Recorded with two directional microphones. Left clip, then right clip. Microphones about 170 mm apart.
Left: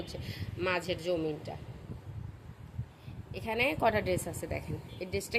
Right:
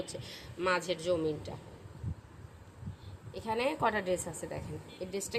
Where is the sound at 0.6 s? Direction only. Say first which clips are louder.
Right 1 dB; 10° left (ahead or behind).